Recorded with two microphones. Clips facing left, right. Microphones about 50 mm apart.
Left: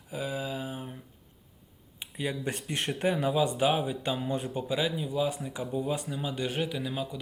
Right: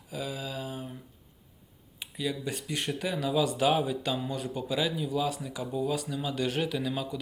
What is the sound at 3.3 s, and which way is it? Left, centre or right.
Speech, left.